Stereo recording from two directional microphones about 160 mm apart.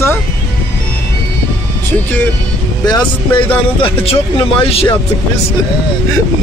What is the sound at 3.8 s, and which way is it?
A man's voice, 35° left (ahead or behind).